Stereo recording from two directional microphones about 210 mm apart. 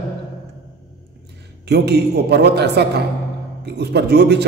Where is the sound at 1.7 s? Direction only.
50° right (ahead or behind).